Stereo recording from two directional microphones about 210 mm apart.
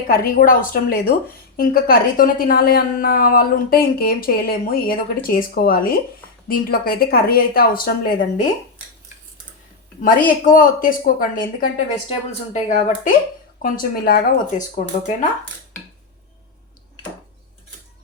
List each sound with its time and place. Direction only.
0.1 s a woman's voice: 40° left (ahead or behind)
10.0 s speech: 40° left (ahead or behind)
13.6 s a woman's voice: 45° left (ahead or behind)